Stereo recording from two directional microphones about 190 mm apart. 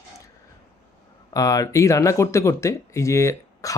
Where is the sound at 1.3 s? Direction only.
15° left (ahead or behind).